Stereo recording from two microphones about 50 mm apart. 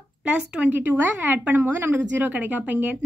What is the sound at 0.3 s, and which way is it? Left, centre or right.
Speech, right.